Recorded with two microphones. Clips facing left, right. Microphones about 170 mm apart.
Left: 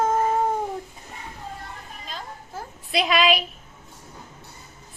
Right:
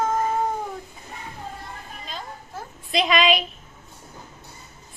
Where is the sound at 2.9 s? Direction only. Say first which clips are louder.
Right 1 dB; 5° left (ahead or behind).